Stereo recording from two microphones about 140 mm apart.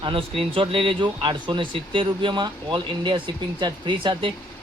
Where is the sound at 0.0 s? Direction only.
40° right (ahead or behind).